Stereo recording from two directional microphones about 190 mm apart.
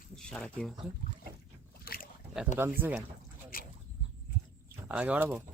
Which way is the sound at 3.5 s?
50° left (ahead or behind).